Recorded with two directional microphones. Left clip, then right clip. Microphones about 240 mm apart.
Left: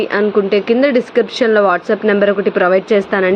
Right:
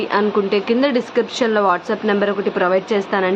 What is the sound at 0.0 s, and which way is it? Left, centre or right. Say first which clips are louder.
Speech: left 3 dB; centre.